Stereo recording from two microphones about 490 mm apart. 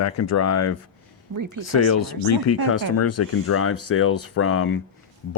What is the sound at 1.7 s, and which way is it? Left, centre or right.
Speech, left.